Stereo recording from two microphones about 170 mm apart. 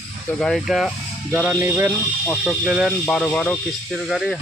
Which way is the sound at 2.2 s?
Centre (ahead or behind).